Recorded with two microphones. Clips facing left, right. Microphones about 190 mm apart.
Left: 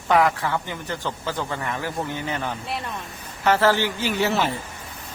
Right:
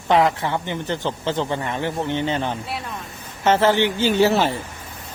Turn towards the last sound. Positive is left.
turn(degrees=-35)  # may be behind; listen again after turning